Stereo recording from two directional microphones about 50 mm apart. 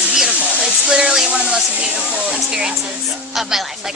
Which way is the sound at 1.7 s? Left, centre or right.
Right.